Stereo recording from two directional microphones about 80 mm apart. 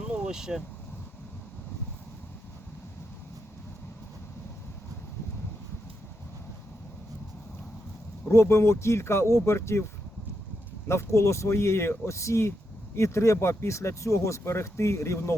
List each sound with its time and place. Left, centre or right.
0.1 s vehicle: centre
8.3 s speech: left